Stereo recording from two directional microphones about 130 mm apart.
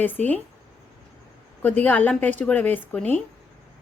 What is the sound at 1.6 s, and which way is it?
Speech, 10° left (ahead or behind).